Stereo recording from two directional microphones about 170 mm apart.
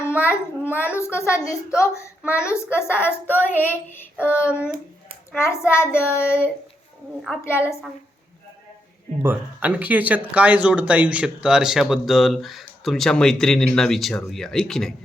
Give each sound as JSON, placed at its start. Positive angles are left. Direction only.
{"t": 0.0, "sound": "a child's voice", "side_deg": 15}
{"t": 4.4, "sound": "a child's voice", "side_deg": -5}
{"t": 5.3, "sound": "a woman's voice", "side_deg": 15}
{"t": 7.6, "sound": "speech", "side_deg": 0}
{"t": 9.2, "sound": "speech", "side_deg": -10}